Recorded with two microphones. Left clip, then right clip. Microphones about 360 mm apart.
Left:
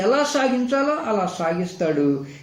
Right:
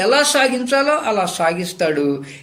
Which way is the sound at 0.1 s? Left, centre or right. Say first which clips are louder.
Right 5 dB; right.